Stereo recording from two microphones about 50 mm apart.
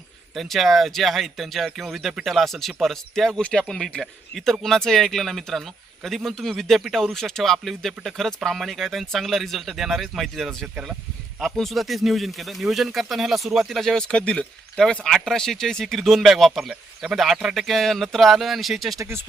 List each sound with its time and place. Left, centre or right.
0.3 s speech: centre
13.9 s speech: centre
15.0 s speech: centre
16.6 s speech: centre
17.3 s speech: centre
18.9 s speech: right